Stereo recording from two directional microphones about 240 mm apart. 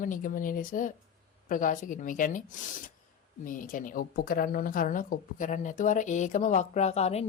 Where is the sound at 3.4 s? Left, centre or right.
Left.